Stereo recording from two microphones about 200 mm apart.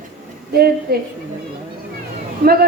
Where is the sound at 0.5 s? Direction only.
50° right (ahead or behind).